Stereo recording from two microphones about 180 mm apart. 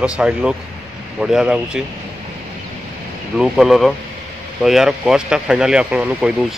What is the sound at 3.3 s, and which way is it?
Speech, 5° right (ahead or behind).